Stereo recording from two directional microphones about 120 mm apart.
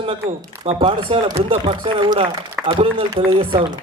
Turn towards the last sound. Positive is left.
turn(degrees=-45)  # may be behind; listen again after turning